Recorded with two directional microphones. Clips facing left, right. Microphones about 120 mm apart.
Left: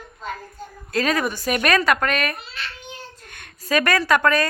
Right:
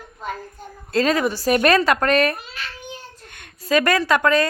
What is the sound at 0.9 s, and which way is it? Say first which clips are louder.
Speech: right 3 dB; 25° right (ahead or behind).